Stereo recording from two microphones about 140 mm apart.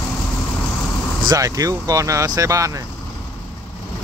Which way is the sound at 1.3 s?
25° right (ahead or behind).